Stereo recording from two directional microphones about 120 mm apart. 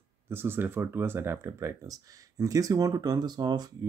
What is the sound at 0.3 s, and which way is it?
Speech, 20° right (ahead or behind).